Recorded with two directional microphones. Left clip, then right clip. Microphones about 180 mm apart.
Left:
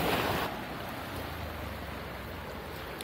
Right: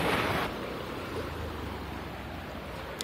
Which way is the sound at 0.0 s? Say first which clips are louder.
Right 1 dB; 40° left (ahead or behind).